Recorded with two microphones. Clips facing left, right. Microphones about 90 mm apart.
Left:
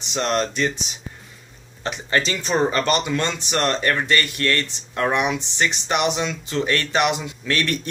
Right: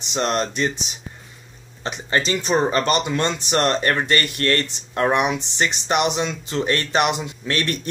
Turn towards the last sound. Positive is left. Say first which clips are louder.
# left 1 dB
turn(degrees=-30)  # may be behind; listen again after turning